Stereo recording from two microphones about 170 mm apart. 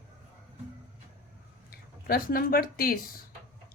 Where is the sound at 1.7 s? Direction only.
60° left (ahead or behind).